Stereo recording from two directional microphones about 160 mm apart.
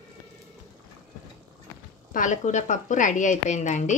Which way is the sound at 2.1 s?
55° left (ahead or behind).